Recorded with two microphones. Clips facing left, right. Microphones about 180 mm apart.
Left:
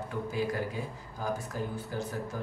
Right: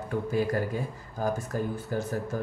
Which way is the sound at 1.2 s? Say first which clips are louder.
Right 5 dB; 50° right (ahead or behind).